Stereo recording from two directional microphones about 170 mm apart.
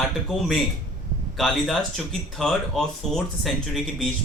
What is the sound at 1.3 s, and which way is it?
Speech, centre (ahead or behind).